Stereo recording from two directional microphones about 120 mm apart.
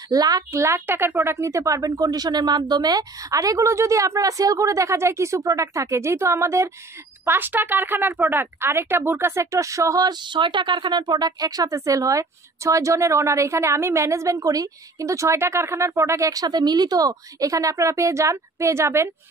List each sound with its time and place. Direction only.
0.1 s speech: 30° right (ahead or behind)